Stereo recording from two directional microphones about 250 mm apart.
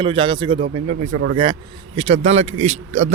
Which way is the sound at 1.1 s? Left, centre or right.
Right.